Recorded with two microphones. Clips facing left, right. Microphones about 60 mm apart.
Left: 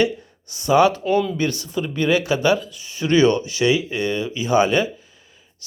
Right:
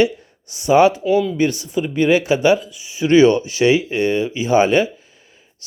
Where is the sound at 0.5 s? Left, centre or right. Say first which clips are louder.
Right 3 dB; right.